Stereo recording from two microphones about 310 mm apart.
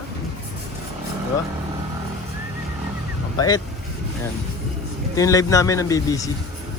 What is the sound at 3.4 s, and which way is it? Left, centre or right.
Speech, centre.